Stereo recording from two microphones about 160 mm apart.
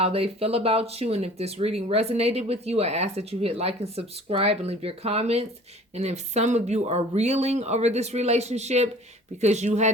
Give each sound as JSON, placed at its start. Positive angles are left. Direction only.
{"t": 0.0, "sound": "speech", "side_deg": -40}